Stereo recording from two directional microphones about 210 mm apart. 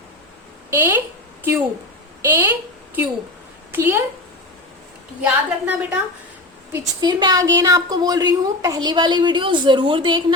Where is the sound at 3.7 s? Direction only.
10° right (ahead or behind).